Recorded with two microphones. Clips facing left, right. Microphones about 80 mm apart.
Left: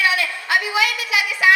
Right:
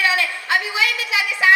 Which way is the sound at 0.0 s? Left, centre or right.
Right.